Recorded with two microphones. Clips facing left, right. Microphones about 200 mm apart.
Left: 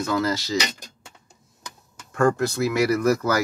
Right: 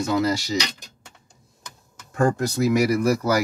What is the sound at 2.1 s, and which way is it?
Speech, 15° right (ahead or behind).